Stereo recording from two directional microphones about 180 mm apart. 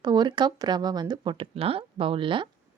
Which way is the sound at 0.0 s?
25° right (ahead or behind).